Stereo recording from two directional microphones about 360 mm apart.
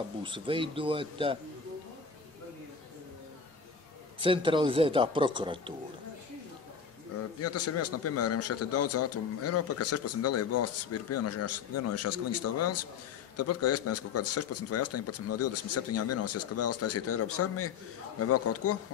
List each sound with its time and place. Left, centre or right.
0.2 s speech: centre
4.2 s speech: centre
7.3 s speech: left